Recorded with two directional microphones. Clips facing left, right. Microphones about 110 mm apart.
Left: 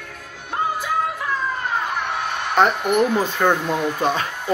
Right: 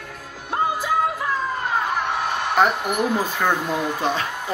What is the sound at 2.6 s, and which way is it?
Speech, 10° right (ahead or behind).